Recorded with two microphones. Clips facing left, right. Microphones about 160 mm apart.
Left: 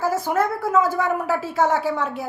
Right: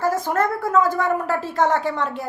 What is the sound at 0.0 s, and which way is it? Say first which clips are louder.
A woman's voice: right 1 dB; 10° left (ahead or behind).